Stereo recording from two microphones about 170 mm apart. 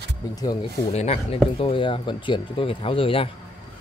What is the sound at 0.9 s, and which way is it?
Speech, 40° left (ahead or behind).